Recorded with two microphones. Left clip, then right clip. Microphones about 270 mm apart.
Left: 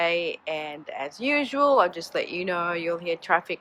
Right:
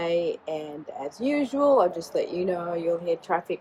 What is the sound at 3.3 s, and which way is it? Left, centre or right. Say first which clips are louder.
Speech: left 3 dB; centre.